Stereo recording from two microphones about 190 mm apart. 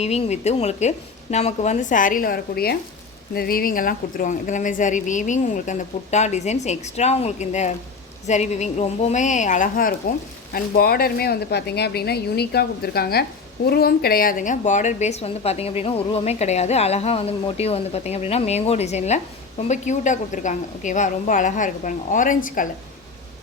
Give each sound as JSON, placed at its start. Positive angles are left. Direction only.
{"t": 0.0, "sound": "a woman's voice", "side_deg": 35}